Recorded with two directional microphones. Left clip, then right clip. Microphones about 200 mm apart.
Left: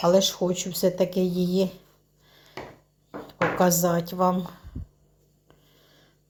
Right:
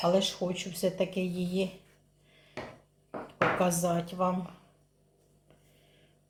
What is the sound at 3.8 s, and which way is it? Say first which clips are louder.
Speech: left 6 dB; 50° left (ahead or behind).